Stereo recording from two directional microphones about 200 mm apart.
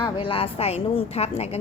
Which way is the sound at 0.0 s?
25° left (ahead or behind).